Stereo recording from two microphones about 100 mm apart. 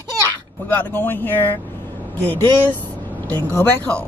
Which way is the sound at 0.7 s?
20° left (ahead or behind).